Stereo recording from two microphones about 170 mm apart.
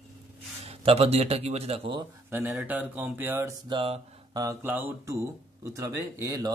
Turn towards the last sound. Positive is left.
turn(degrees=-20)  # may be behind; listen again after turning